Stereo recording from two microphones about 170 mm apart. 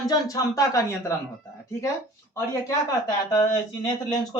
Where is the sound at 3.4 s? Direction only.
25° left (ahead or behind).